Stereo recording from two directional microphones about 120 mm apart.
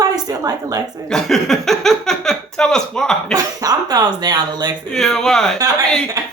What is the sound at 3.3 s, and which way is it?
Speech, 30° right (ahead or behind).